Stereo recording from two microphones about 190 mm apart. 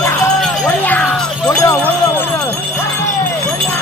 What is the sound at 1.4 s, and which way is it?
Clip-clop, 15° left (ahead or behind).